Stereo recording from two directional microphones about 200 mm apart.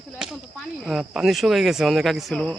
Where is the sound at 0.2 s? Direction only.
5° right (ahead or behind).